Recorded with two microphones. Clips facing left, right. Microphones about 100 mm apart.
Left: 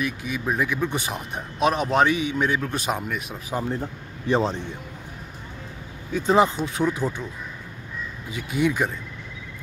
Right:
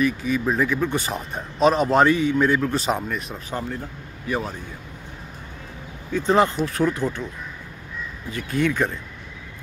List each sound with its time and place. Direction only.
0.0 s speech: 5° left (ahead or behind)
3.6 s speech: 25° left (ahead or behind)
6.1 s speech: 15° left (ahead or behind)
6.6 s speech: centre (ahead or behind)
6.9 s speech: 10° left (ahead or behind)
8.3 s speech: 10° left (ahead or behind)